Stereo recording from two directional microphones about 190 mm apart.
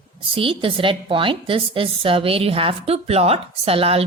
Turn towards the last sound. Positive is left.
turn(degrees=-30)  # may be behind; listen again after turning